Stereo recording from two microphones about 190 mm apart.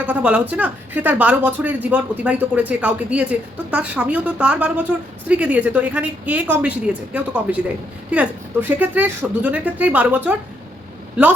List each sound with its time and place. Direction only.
0.0 s speech: 5° right (ahead or behind)